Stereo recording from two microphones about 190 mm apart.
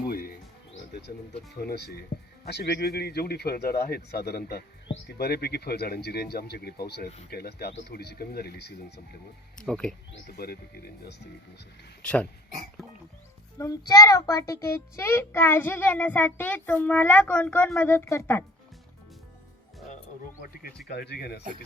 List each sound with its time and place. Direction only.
0.7 s music: 60° left (ahead or behind)
1.5 s speech: 60° left (ahead or behind)
9.6 s speech: 5° left (ahead or behind)
10.1 s speech: 55° left (ahead or behind)
12.0 s a child's voice: 5° left (ahead or behind)
13.6 s a child's voice: 15° left (ahead or behind)
20.4 s speech: 50° left (ahead or behind)